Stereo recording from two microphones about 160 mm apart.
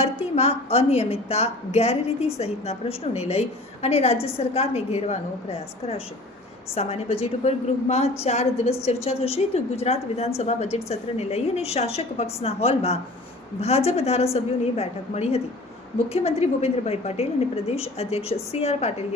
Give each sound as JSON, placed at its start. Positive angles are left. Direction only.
{"t": 0.0, "sound": "a woman's voice", "side_deg": 40}